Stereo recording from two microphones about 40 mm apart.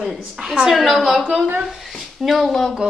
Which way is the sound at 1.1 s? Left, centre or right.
Right.